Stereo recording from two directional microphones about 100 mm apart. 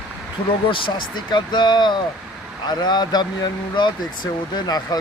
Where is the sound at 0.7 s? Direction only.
60° left (ahead or behind).